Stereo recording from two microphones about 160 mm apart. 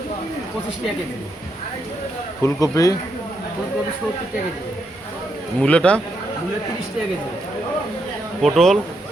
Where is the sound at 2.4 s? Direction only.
20° left (ahead or behind).